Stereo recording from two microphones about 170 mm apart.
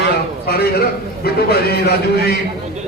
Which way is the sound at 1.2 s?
65° left (ahead or behind).